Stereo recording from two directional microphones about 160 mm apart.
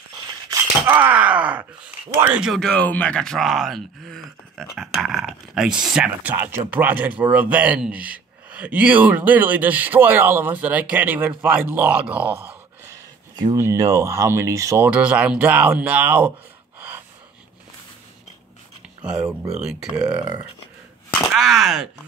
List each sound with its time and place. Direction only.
0.3 s groan: 15° right (ahead or behind)
2.1 s speech: 10° right (ahead or behind)
19.0 s speech: 5° right (ahead or behind)
20.2 s speech: 20° right (ahead or behind)
21.3 s speech: centre (ahead or behind)